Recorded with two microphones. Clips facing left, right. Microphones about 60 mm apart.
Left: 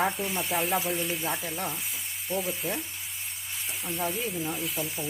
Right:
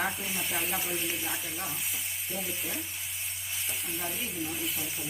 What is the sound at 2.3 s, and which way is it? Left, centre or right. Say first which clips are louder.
Frying: left 7 dB; centre.